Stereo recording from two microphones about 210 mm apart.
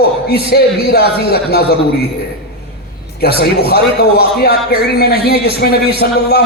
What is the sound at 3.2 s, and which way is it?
A man's voice, 50° left (ahead or behind).